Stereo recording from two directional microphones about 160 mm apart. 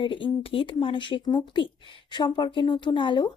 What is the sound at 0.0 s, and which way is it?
A woman's voice, 35° left (ahead or behind).